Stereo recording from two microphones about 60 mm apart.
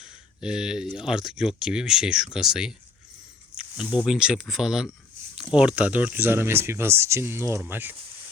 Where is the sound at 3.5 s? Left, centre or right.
Centre.